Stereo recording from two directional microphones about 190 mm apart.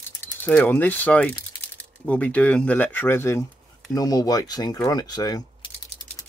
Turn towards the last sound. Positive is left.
turn(degrees=20)  # may be behind; listen again after turning